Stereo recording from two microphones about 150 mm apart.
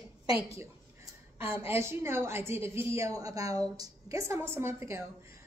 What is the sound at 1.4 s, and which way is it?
A woman's voice, 15° right (ahead or behind).